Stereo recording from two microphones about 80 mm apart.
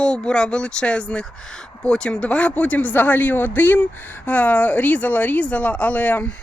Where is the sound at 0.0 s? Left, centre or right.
Centre.